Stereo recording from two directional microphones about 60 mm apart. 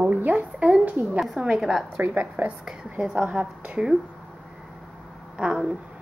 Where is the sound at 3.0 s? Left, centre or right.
Centre.